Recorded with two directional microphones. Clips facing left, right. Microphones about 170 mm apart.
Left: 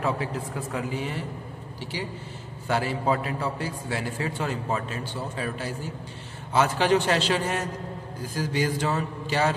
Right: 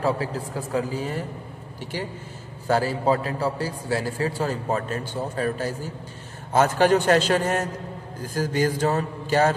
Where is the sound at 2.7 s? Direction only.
40° right (ahead or behind).